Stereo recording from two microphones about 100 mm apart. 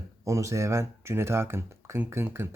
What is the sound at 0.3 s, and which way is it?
Speech, 30° right (ahead or behind).